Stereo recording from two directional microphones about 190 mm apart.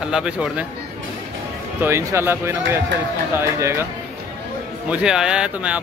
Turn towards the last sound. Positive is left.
turn(degrees=-5)  # may be behind; listen again after turning